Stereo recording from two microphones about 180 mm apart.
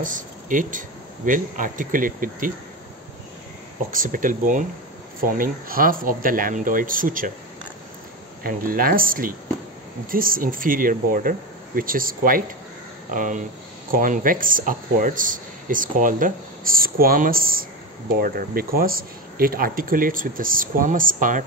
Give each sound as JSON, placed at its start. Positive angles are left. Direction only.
{"t": 0.0, "sound": "speech", "side_deg": -45}
{"t": 3.9, "sound": "speech", "side_deg": -50}
{"t": 8.5, "sound": "speech", "side_deg": -50}